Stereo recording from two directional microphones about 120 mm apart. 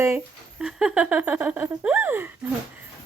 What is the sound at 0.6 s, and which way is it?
A woman's voice, 5° right (ahead or behind).